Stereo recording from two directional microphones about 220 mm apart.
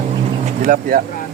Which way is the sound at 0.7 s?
40° right (ahead or behind).